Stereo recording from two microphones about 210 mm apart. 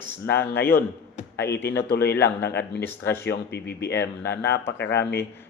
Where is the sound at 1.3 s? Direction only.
55° left (ahead or behind).